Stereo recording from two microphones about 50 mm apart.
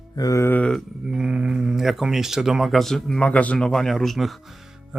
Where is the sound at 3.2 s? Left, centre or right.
Left.